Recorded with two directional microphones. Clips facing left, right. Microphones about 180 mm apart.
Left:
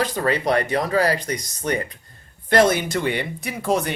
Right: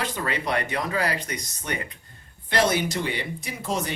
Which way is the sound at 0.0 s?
40° left (ahead or behind).